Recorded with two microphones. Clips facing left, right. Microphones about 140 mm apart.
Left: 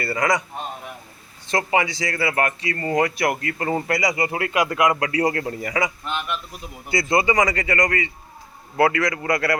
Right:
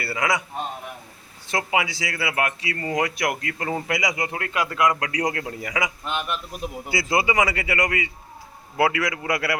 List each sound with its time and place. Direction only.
0.0 s speech: 5° right (ahead or behind)
1.5 s speech: 5° right (ahead or behind)